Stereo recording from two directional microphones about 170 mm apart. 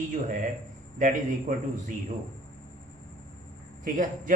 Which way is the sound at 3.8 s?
50° right (ahead or behind).